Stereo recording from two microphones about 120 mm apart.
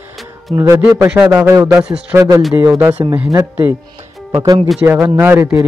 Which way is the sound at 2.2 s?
25° right (ahead or behind).